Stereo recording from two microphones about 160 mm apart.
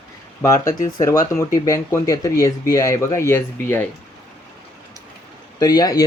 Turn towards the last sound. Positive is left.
turn(degrees=25)  # may be behind; listen again after turning